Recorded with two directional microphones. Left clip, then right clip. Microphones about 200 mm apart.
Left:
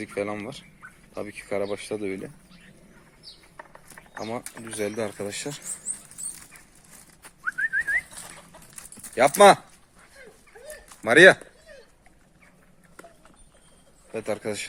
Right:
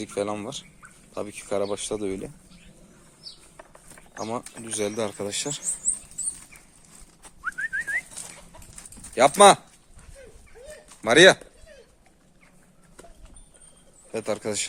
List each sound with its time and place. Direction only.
0.0 s speech: 10° right (ahead or behind)
3.6 s a sound: 20° right (ahead or behind)
4.3 s speech: 15° right (ahead or behind)
7.4 s bird: 5° right (ahead or behind)
9.1 s speech: 10° right (ahead or behind)
11.0 s speech: 5° right (ahead or behind)
14.1 s speech: 10° right (ahead or behind)